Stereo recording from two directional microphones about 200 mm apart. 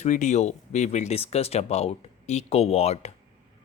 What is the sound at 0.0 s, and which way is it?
Speech, 35° left (ahead or behind).